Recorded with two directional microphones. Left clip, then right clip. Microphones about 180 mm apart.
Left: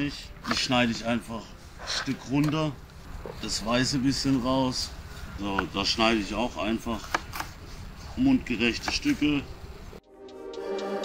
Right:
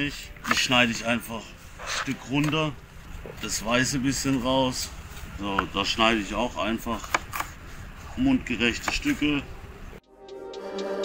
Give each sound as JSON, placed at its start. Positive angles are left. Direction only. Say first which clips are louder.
{"t": 0.0, "sound": "speech", "louder": "right 3 dB", "side_deg": -5}